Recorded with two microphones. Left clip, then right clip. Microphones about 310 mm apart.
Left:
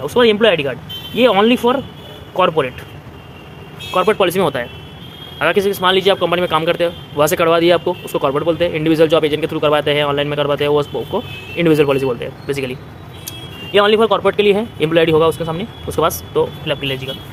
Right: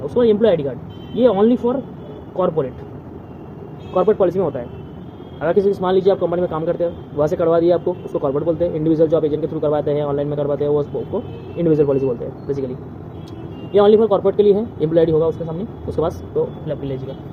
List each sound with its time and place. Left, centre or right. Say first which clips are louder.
0.0 s a man's voice: left 3 dB; left
3.9 s a man's voice: left 2 dB; left
13.7 s a man's voice: left 1 dB; left